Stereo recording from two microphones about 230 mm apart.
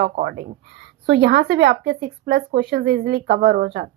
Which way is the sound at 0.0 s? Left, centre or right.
Right.